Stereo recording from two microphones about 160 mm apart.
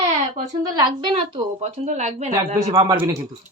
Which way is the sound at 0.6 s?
25° right (ahead or behind).